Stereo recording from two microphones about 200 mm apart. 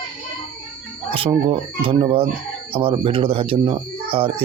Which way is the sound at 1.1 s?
25° right (ahead or behind).